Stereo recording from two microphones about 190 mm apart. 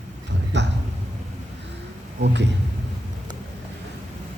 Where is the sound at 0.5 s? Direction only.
65° right (ahead or behind).